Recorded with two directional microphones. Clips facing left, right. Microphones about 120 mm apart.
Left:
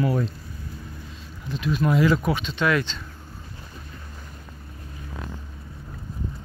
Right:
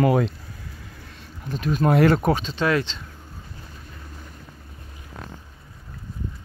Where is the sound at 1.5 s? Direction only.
45° right (ahead or behind).